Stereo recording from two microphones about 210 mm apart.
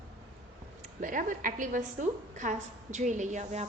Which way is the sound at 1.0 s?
40° right (ahead or behind).